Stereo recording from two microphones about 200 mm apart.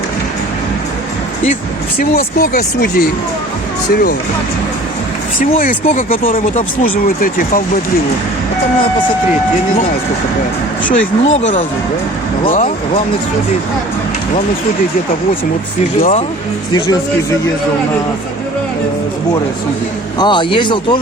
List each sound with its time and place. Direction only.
2.0 s speech: 45° left (ahead or behind)
5.5 s speech: 40° left (ahead or behind)
10.8 s speech: 35° left (ahead or behind)
16.0 s speech: 40° left (ahead or behind)
20.1 s speech: 25° left (ahead or behind)